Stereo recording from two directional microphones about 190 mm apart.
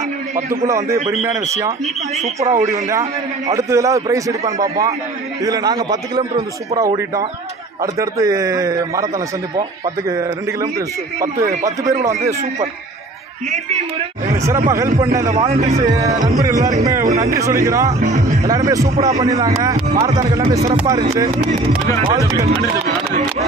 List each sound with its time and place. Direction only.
0.5 s a man's voice: 15° right (ahead or behind)
10.0 s a man's voice: 15° right (ahead or behind)
13.5 s a man's voice: 35° right (ahead or behind)
14.2 s a man's voice: 15° right (ahead or behind)
15.8 s a man's voice: 20° right (ahead or behind)
18.0 s music: 35° right (ahead or behind)
18.4 s a man's voice: 20° right (ahead or behind)
19.9 s a man's voice: 35° right (ahead or behind)
20.2 s a man's voice: 20° right (ahead or behind)
22.1 s a man's voice: 15° right (ahead or behind)